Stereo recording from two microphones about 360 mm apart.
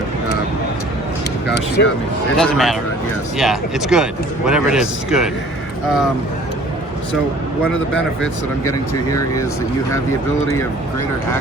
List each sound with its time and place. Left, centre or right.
1.5 s speech: left
2.4 s speech: centre